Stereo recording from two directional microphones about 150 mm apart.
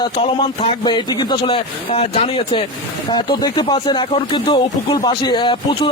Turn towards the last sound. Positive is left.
turn(degrees=30)  # may be behind; listen again after turning